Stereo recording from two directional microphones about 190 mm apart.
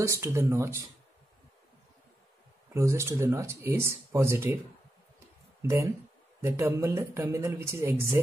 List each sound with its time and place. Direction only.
0.0 s speech: 15° right (ahead or behind)
2.7 s speech: 15° right (ahead or behind)
5.6 s speech: 15° right (ahead or behind)